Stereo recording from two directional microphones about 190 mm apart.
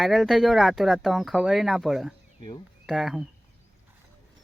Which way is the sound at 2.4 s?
25° left (ahead or behind).